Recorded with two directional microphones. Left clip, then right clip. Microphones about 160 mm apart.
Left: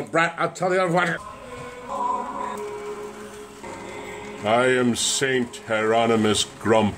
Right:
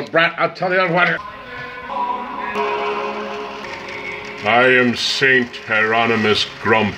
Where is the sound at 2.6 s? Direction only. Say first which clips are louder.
Right 12 dB; 45° right (ahead or behind).